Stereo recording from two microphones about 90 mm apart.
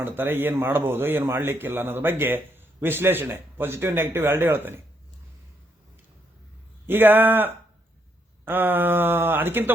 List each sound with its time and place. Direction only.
0.0 s a man's voice: 25° right (ahead or behind)
6.8 s a man's voice: 20° right (ahead or behind)